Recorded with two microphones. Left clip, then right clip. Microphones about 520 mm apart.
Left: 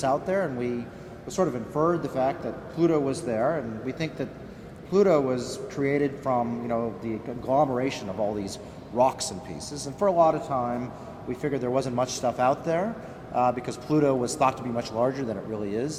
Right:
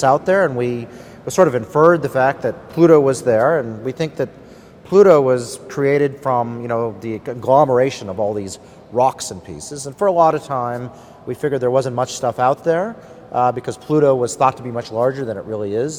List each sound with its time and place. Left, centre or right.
0.0 s a man's voice: right